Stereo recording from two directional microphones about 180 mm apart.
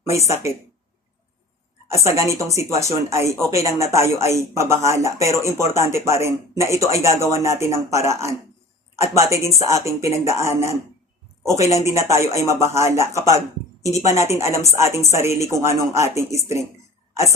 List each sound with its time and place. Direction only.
0.0 s speech: 15° right (ahead or behind)
1.9 s speech: 15° right (ahead or behind)